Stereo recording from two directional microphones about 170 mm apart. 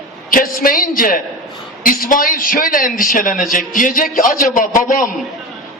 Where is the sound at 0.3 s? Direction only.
55° left (ahead or behind).